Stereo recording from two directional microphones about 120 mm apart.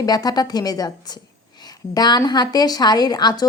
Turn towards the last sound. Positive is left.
turn(degrees=35)  # may be behind; listen again after turning